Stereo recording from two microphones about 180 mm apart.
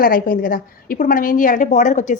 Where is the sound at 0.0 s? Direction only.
50° left (ahead or behind).